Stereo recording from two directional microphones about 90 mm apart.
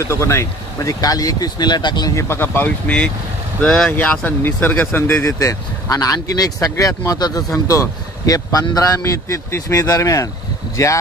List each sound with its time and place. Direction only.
0.0 s speech: 30° left (ahead or behind); by 2.1 s 55° left (ahead or behind)
2.1 s speech: 25° left (ahead or behind)
3.6 s speech: 5° left (ahead or behind); by 5.2 s 20° left (ahead or behind)
5.2 s speech: 35° left (ahead or behind)